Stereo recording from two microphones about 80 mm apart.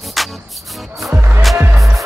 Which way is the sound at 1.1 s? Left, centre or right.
Right.